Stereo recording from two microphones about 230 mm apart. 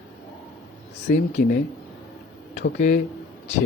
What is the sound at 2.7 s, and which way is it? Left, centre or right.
Speech, left.